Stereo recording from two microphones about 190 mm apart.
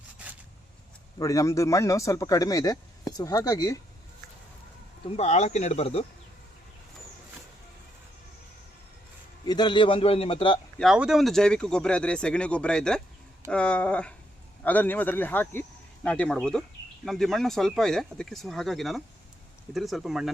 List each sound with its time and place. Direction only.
1.2 s a man's voice: 15° left (ahead or behind)
5.1 s speech: 35° left (ahead or behind)
9.5 s a man's voice: 20° left (ahead or behind)
10.8 s a man's voice: 5° right (ahead or behind)